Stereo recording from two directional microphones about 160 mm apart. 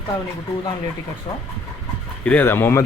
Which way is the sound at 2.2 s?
10° left (ahead or behind).